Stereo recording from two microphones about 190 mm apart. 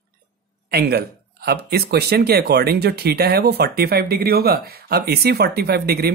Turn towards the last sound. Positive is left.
turn(degrees=-55)  # may be behind; listen again after turning